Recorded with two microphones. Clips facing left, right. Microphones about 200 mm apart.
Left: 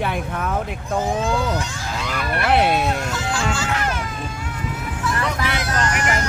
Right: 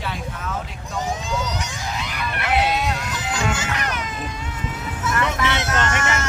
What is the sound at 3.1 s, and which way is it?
Music, 20° right (ahead or behind).